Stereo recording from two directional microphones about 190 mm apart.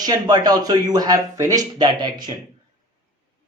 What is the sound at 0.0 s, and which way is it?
Speech, 20° right (ahead or behind).